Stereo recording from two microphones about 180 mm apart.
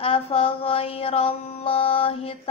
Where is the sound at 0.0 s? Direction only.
35° left (ahead or behind).